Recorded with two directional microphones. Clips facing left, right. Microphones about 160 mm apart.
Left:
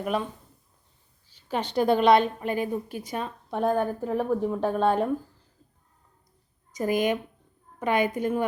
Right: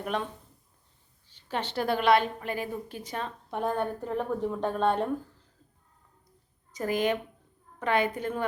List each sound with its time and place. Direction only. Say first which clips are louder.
0.0 s speech: left 4 dB; 5° left (ahead or behind)
1.3 s a woman's voice: left 4 dB; 10° left (ahead or behind)
6.7 s a woman's voice: left 3 dB; 15° left (ahead or behind)